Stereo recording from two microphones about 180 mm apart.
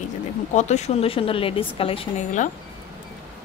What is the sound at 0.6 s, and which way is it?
A woman's voice, 40° left (ahead or behind).